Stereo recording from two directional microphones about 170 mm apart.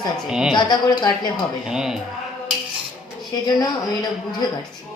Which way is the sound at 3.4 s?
25° left (ahead or behind).